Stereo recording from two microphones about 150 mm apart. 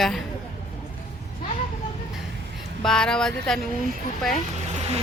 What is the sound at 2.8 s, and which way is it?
Speech, 5° left (ahead or behind).